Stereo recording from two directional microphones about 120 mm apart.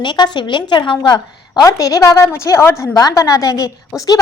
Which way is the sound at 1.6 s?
25° left (ahead or behind).